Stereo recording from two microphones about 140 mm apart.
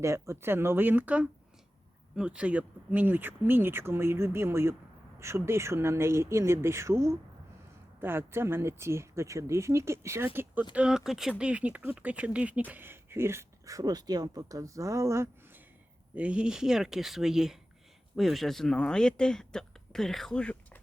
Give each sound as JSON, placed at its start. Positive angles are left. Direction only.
{"t": 0.0, "sound": "speech", "side_deg": -20}
{"t": 16.1, "sound": "speech", "side_deg": -10}